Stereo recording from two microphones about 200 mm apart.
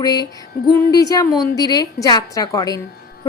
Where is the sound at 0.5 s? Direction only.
50° left (ahead or behind).